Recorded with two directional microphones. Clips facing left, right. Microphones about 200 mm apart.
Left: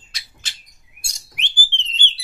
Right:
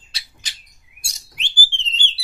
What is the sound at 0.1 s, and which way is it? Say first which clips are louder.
Bird: right 1 dB; 30° right (ahead or behind).